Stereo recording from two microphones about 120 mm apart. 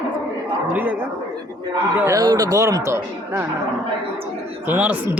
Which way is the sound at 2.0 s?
30° right (ahead or behind).